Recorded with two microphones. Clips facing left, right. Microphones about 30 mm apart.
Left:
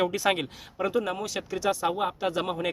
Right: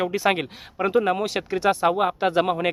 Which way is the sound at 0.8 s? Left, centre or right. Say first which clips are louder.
Right 7 dB; right.